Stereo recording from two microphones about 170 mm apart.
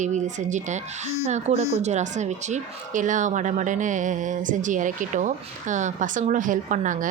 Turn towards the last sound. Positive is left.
turn(degrees=-50)  # may be behind; listen again after turning